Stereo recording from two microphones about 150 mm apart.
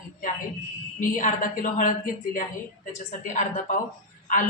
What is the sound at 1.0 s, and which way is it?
A man's voice, 60° left (ahead or behind).